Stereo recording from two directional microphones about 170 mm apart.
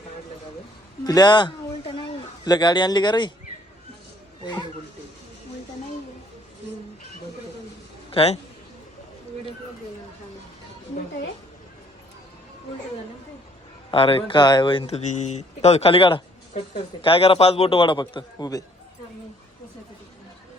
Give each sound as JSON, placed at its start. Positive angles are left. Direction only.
{"t": 1.0, "sound": "a man's voice", "side_deg": 25}
{"t": 8.1, "sound": "a man's voice", "side_deg": 35}
{"t": 13.9, "sound": "speech", "side_deg": 30}